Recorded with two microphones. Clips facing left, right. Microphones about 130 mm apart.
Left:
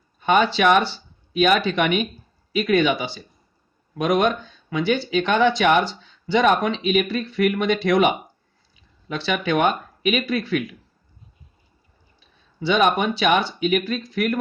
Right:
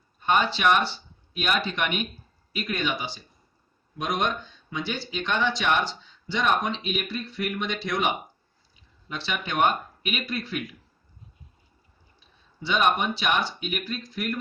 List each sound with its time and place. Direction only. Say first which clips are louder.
0.2 s speech: left 6 dB; 75° left (ahead or behind)
7.0 s speech: left 10 dB; 60° left (ahead or behind)
9.0 s speech: left 9 dB; 75° left (ahead or behind)
12.5 s speech: left 5 dB; 80° left